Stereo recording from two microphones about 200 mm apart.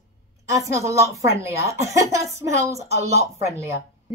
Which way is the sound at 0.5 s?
15° right (ahead or behind).